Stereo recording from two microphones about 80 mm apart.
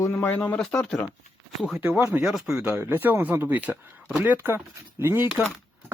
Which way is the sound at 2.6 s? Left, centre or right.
Right.